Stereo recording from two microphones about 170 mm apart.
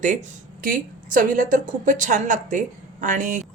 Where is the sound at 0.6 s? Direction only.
55° right (ahead or behind).